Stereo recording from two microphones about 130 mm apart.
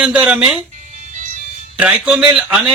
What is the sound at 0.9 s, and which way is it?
Music, 75° right (ahead or behind).